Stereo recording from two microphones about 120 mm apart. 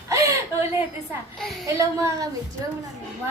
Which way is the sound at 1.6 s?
25° right (ahead or behind).